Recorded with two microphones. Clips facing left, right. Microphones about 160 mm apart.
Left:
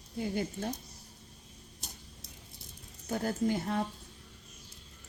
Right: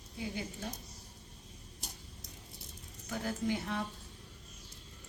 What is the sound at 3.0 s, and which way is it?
Speech, 40° left (ahead or behind).